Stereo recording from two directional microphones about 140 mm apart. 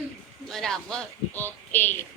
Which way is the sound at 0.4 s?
5° left (ahead or behind).